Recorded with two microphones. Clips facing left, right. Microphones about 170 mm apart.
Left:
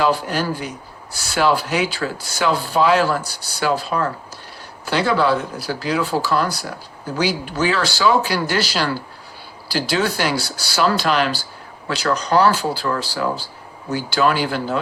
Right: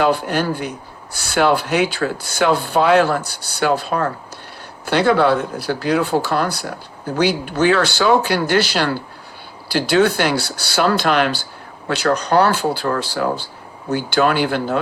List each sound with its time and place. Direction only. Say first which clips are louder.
0.0 s speech: right 2 dB; 55° right (ahead or behind)